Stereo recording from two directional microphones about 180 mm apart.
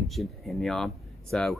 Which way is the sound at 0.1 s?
Centre (ahead or behind).